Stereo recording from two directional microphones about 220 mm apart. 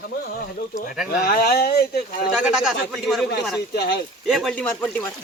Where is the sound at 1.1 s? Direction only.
45° left (ahead or behind).